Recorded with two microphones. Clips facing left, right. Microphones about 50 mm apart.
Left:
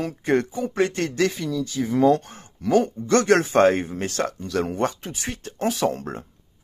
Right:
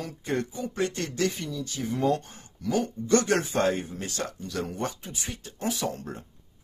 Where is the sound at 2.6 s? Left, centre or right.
Left.